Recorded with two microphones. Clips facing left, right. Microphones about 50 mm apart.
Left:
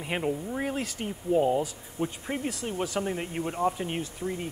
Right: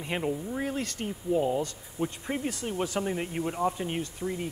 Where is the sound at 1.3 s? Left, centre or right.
Centre.